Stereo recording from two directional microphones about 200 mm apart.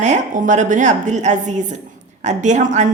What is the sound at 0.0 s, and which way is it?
A woman's voice, 35° right (ahead or behind).